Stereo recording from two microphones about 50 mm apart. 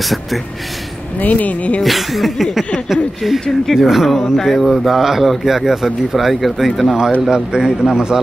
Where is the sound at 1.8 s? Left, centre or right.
Centre.